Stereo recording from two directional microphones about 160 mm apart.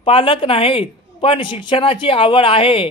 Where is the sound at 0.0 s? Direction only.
35° left (ahead or behind).